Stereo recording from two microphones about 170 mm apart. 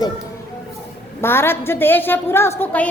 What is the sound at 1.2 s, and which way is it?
A child's voice, 15° left (ahead or behind).